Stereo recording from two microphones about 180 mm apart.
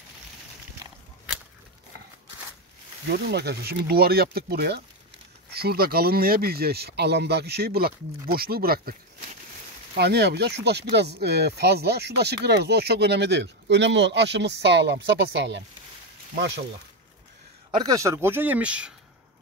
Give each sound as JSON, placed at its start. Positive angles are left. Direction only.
{"t": 3.1, "sound": "speech", "side_deg": -65}
{"t": 9.9, "sound": "speech", "side_deg": -70}
{"t": 17.6, "sound": "speech", "side_deg": -20}